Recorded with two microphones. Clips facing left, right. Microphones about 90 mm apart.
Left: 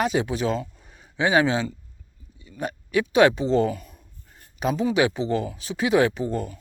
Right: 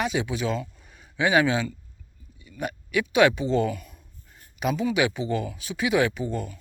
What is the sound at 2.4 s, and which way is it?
Speech, 30° left (ahead or behind).